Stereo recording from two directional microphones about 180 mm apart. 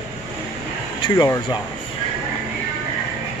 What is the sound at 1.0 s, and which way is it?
Speech, 25° left (ahead or behind).